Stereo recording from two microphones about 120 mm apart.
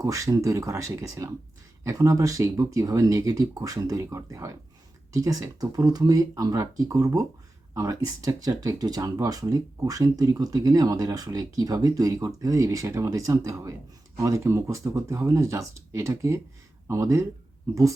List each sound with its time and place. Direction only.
0.0 s speech: 25° right (ahead or behind)